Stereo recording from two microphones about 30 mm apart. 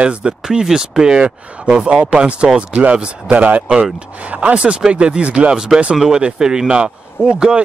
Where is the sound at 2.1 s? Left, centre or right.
Right.